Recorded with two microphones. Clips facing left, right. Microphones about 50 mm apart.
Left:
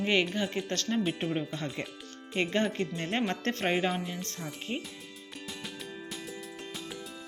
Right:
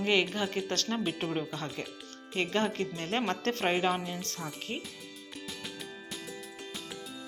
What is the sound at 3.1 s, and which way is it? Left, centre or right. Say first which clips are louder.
Speech: right 1 dB; centre.